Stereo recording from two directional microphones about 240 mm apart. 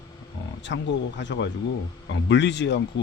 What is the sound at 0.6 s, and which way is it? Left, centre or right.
Speech, left.